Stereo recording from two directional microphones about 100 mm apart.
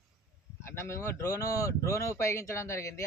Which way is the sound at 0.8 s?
25° left (ahead or behind).